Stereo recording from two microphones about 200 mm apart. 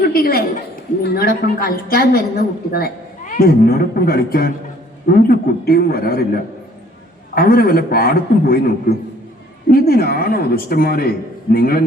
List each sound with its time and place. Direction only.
0.0 s a woman's voice: 50° left (ahead or behind)